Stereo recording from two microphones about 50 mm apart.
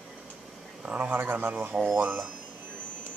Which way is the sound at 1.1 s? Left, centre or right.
Right.